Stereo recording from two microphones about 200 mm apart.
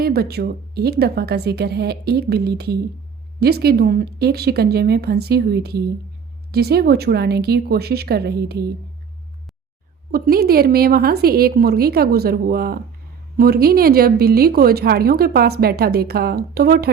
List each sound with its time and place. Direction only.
0.0 s speech: 50° right (ahead or behind)
10.1 s speech: 50° right (ahead or behind)